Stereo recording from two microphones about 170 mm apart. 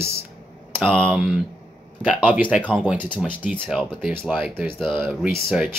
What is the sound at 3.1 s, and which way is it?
Speech, 5° left (ahead or behind).